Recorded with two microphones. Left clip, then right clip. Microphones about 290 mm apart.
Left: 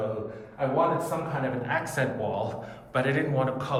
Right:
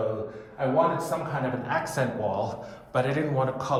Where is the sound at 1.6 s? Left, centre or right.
Centre.